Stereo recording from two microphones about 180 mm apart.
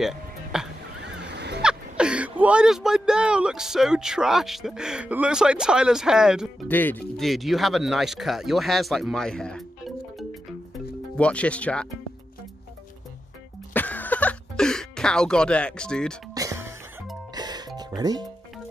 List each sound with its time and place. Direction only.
0.0 s music: 5° right (ahead or behind)
1.0 s a sound: 70° right (ahead or behind)
1.6 s speech: 5° right (ahead or behind)
6.7 s speech: 10° left (ahead or behind)
13.7 s a sound: 10° left (ahead or behind)
16.3 s music: 15° right (ahead or behind)